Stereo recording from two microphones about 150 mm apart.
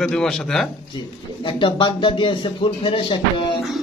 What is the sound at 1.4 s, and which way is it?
Speech, 30° left (ahead or behind).